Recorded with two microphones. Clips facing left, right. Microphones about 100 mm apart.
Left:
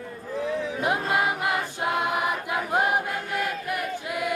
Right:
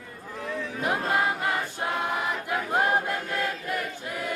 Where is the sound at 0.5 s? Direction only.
20° left (ahead or behind).